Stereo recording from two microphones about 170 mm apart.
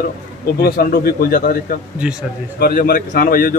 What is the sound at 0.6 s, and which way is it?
Speech, 65° left (ahead or behind).